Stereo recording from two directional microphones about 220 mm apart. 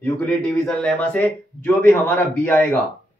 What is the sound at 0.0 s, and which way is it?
Speech, 5° left (ahead or behind).